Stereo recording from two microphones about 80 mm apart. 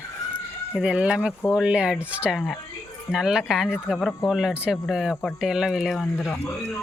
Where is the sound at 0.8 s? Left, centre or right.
Centre.